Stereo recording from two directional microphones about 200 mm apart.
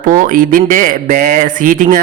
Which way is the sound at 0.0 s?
40° right (ahead or behind).